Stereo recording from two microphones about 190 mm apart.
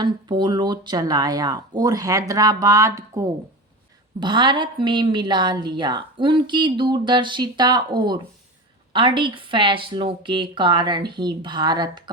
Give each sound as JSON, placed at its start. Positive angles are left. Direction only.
{"t": 0.0, "sound": "a woman's voice", "side_deg": -25}